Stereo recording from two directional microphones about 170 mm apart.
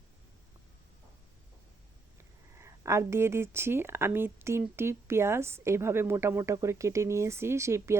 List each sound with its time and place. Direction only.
2.6 s a woman's voice: 15° right (ahead or behind)